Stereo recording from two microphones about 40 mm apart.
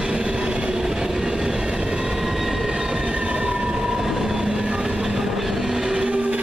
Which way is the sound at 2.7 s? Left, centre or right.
Centre.